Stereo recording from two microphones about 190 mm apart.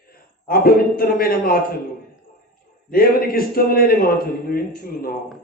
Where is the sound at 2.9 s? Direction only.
50° left (ahead or behind).